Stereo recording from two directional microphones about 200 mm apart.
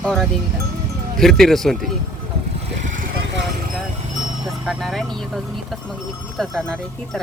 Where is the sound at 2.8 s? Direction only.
40° right (ahead or behind).